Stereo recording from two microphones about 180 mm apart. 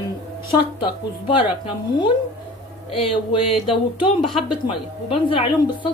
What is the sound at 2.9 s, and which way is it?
A woman's voice, 30° left (ahead or behind).